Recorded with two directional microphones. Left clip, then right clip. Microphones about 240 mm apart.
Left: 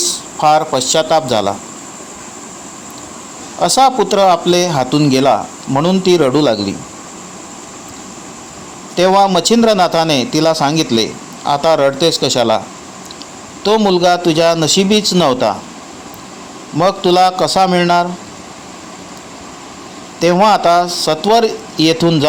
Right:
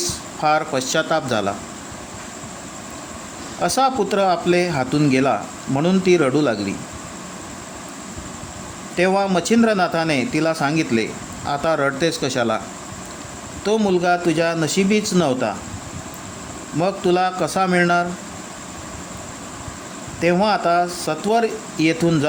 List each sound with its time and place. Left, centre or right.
0.0 s a man's voice: centre
3.6 s speech: centre
9.0 s speech: centre
14.0 s speech: centre
17.1 s speech: centre
20.2 s speech: centre